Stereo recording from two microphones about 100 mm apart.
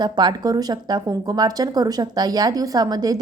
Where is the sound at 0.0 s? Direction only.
45° right (ahead or behind).